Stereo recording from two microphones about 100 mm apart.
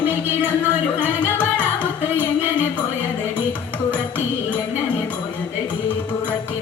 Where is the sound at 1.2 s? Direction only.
15° left (ahead or behind).